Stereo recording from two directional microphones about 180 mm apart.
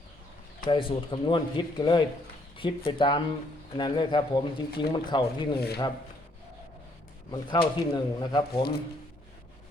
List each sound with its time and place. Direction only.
0.7 s speech: 30° left (ahead or behind)
7.3 s speech: 25° left (ahead or behind)